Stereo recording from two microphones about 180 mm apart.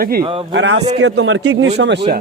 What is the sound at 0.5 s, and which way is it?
A man's voice, 90° right.